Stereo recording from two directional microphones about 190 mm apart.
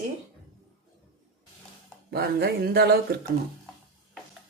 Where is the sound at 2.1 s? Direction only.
55° right (ahead or behind).